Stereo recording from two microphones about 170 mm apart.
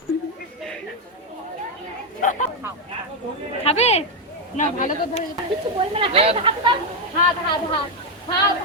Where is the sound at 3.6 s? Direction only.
40° left (ahead or behind).